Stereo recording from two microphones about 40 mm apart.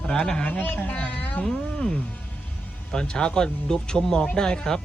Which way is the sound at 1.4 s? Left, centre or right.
Centre.